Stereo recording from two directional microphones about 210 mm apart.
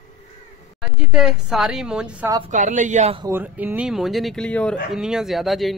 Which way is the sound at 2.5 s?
35° right (ahead or behind).